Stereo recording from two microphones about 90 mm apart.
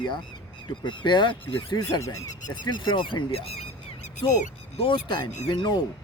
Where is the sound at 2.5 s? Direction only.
55° left (ahead or behind); by 3.5 s 80° left.